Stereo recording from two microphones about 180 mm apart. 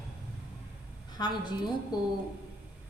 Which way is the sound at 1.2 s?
25° left (ahead or behind).